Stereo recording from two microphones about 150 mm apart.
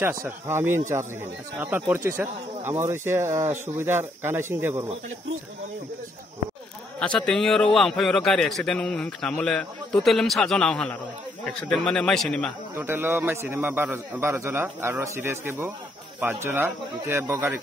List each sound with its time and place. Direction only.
0.0 s a man's voice: 15° right (ahead or behind)
7.2 s a man's voice: 5° left (ahead or behind)
12.7 s a man's voice: 15° right (ahead or behind)